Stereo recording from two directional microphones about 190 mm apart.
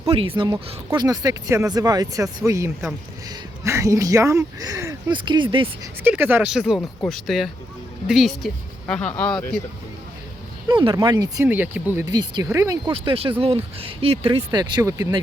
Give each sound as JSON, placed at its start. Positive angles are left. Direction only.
{"t": 0.1, "sound": "speech", "side_deg": -30}
{"t": 6.0, "sound": "speech", "side_deg": -10}
{"t": 10.7, "sound": "speech", "side_deg": -25}
{"t": 12.0, "sound": "speech", "side_deg": -20}